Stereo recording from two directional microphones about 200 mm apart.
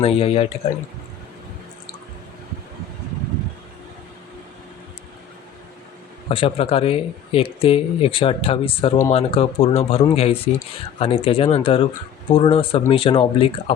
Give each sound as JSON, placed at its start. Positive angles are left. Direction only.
{"t": 0.0, "sound": "speech", "side_deg": 30}
{"t": 6.2, "sound": "speech", "side_deg": 30}